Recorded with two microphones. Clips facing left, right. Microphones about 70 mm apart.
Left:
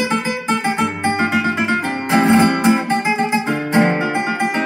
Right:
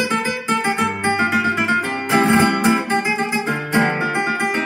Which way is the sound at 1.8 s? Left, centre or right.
Left.